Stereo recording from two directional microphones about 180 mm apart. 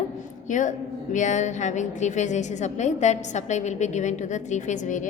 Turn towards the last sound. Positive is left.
turn(degrees=45)  # may be behind; listen again after turning